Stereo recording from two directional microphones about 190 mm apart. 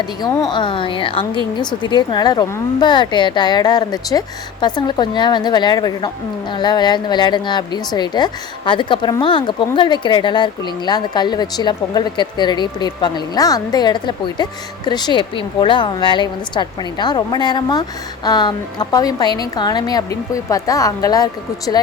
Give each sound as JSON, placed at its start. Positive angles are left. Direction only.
{"t": 0.0, "sound": "a woman's voice", "side_deg": 20}